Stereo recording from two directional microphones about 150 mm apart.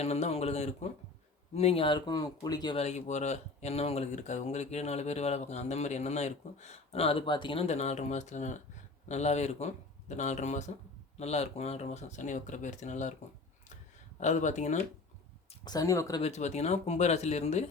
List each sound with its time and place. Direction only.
0.0 s a sound: 45° left (ahead or behind)
1.5 s speech: 40° left (ahead or behind)
2.7 s speech: 50° left (ahead or behind)
14.2 s speech: 55° left (ahead or behind)
15.6 s speech: 25° left (ahead or behind)
16.2 s speech: 50° left (ahead or behind)